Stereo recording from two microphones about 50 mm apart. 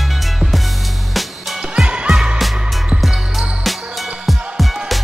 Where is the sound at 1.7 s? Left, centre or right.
Centre.